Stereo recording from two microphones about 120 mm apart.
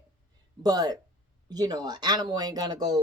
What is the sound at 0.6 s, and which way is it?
Speech, 35° right (ahead or behind).